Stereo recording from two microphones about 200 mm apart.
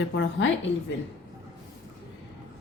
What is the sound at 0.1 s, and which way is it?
Speech, 70° left (ahead or behind).